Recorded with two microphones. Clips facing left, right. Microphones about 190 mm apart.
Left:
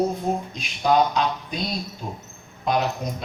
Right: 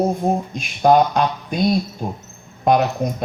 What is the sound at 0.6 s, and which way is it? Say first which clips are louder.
Speech: right 6 dB; 50° right (ahead or behind).